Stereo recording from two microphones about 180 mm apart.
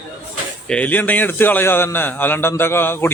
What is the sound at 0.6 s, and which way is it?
A man's voice, 10° left (ahead or behind).